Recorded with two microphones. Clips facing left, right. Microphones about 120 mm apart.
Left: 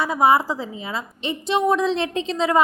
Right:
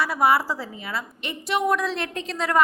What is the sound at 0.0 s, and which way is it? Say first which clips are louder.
A woman's voice: left 3 dB; 20° left (ahead or behind).